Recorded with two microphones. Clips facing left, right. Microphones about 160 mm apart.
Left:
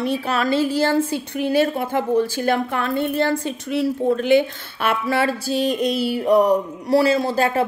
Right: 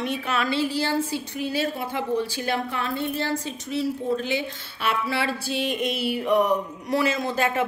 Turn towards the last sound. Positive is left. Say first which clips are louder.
# left 5 dB
turn(degrees=35)  # may be behind; listen again after turning